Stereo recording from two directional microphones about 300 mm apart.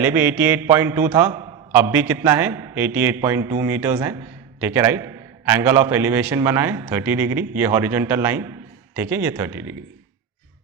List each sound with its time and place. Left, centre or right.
0.0 s a man's voice: centre